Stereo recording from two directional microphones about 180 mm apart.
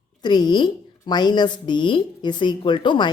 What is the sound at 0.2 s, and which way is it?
A woman's voice, 25° left (ahead or behind).